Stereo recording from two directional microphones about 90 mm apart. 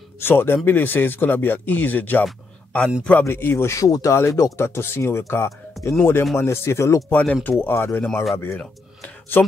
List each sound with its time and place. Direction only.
0.2 s speech: 25° left (ahead or behind)
3.3 s speech: 25° left (ahead or behind)
3.8 s speech: 40° left (ahead or behind)
4.6 s speech: 30° left (ahead or behind)
7.1 s speech: 15° left (ahead or behind)
8.0 s speech: 5° left (ahead or behind)
8.5 s speech: 15° left (ahead or behind)